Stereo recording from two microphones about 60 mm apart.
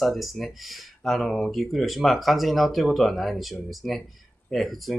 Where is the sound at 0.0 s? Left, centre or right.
Centre.